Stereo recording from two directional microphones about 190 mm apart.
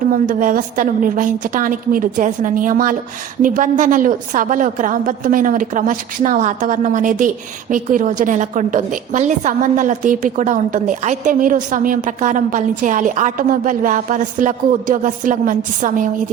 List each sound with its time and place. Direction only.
0.1 s a woman's voice: 45° right (ahead or behind)